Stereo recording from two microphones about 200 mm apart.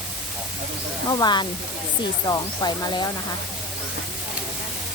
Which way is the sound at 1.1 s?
20° left (ahead or behind).